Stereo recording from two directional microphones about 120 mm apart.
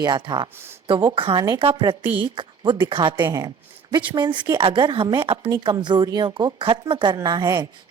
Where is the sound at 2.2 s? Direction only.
40° right (ahead or behind).